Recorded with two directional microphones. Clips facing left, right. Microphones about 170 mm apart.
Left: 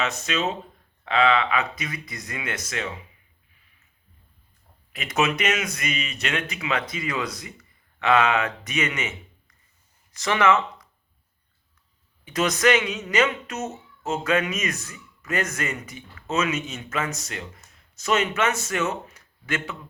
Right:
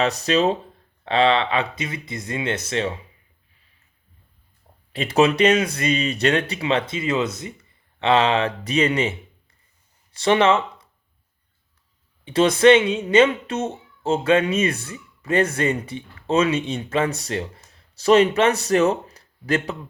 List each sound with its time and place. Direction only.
0.0 s speech: 35° right (ahead or behind)
4.9 s speech: 30° right (ahead or behind)
12.2 s speech: 30° right (ahead or behind)